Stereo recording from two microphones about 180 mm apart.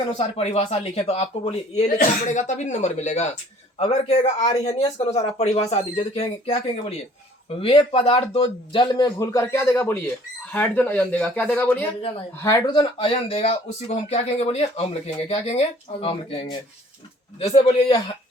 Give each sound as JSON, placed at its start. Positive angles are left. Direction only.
{"t": 0.2, "sound": "speech", "side_deg": 35}
{"t": 7.6, "sound": "speech", "side_deg": 30}